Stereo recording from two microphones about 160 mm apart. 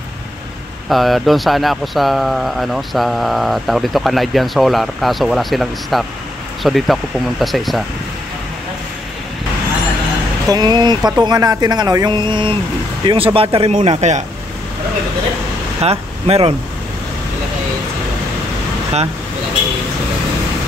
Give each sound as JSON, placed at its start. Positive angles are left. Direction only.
{"t": 0.8, "sound": "speech", "side_deg": 0}
{"t": 10.5, "sound": "speech", "side_deg": -25}
{"t": 15.8, "sound": "speech", "side_deg": -40}